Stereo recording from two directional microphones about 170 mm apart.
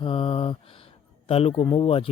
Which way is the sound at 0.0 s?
30° left (ahead or behind).